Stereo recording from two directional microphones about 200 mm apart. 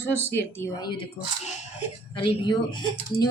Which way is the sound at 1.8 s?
25° left (ahead or behind).